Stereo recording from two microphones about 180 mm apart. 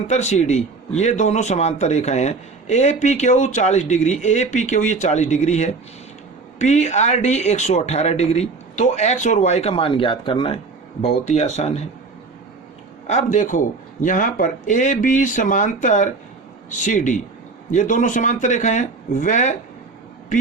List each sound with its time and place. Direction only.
0.1 s a man's voice: 40° left (ahead or behind)
13.1 s speech: 40° left (ahead or behind)